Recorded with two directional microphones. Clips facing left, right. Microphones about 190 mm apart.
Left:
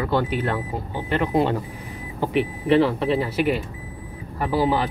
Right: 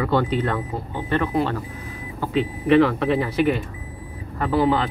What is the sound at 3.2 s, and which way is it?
Speech, 5° left (ahead or behind).